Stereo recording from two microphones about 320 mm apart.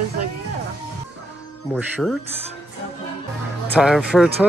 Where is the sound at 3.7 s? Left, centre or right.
Centre.